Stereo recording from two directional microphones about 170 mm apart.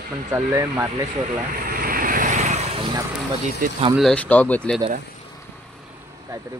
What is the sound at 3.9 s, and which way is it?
Speech, 5° left (ahead or behind).